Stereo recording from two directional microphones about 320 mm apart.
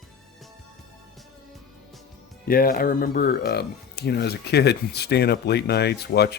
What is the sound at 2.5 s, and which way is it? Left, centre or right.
Speech, left.